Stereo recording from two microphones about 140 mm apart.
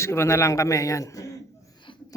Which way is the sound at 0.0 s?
20° left (ahead or behind).